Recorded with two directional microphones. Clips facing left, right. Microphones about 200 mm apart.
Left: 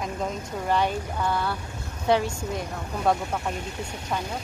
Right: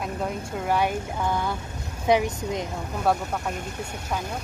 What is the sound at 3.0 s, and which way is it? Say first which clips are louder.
Speech: even; 5° right (ahead or behind).